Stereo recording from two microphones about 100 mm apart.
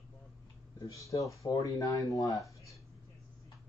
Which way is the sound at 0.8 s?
30° left (ahead or behind).